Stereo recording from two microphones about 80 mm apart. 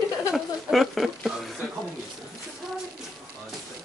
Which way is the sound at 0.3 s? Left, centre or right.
Centre.